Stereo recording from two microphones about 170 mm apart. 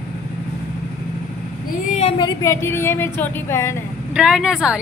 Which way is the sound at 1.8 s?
40° left (ahead or behind).